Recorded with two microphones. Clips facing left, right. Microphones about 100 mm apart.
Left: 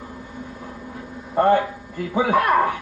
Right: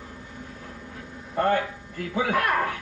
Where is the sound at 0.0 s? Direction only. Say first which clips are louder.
Left 6 dB; 35° left (ahead or behind).